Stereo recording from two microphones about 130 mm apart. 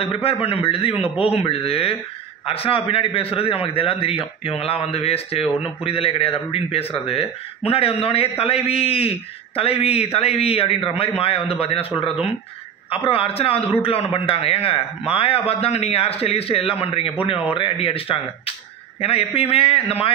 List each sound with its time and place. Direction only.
0.0 s a man's voice: 45° left (ahead or behind)